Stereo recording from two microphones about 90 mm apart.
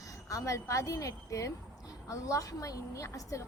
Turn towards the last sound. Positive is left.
turn(degrees=35)  # may be behind; listen again after turning